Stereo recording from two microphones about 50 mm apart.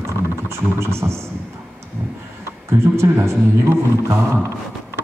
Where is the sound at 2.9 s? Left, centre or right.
Right.